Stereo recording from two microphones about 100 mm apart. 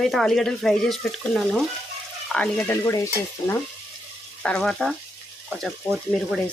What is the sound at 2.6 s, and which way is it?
Stir, 25° left (ahead or behind).